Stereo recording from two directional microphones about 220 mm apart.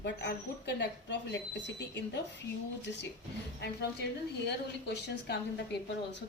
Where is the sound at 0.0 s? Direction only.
50° left (ahead or behind).